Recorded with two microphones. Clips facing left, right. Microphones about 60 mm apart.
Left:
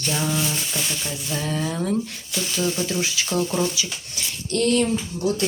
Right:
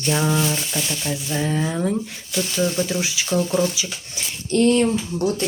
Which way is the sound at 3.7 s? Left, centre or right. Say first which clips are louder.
Even; right.